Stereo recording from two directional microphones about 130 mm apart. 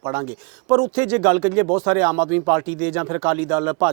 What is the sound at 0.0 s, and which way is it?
Speech, 25° right (ahead or behind).